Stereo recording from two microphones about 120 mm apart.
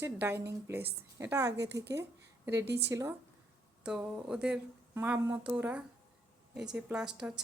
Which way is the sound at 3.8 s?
10° right (ahead or behind).